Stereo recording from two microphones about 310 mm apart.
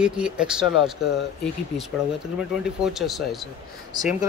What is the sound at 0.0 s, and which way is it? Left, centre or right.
Speech, centre.